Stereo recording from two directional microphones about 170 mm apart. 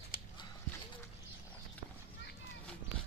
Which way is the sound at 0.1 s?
60° left (ahead or behind).